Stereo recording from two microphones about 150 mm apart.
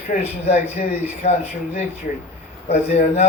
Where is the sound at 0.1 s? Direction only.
45° left (ahead or behind).